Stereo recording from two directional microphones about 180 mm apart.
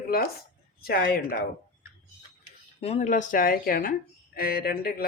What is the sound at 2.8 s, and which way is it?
Speech, 35° left (ahead or behind).